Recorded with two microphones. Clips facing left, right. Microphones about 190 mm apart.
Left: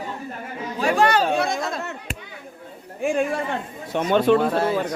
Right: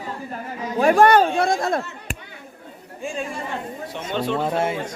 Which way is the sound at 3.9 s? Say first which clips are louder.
Left 8 dB; 55° left (ahead or behind).